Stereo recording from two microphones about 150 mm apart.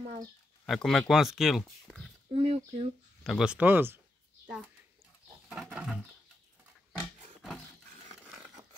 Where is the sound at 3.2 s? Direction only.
5° right (ahead or behind).